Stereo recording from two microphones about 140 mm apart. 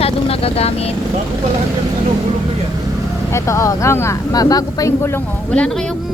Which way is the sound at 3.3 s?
20° left (ahead or behind).